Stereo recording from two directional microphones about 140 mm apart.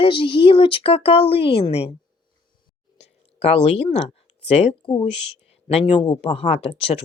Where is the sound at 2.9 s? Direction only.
50° left (ahead or behind).